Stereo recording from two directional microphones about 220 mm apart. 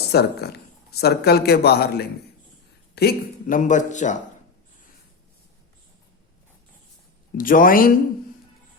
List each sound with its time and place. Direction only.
0.1 s a man's voice: 45° left (ahead or behind)
7.3 s speech: 40° left (ahead or behind)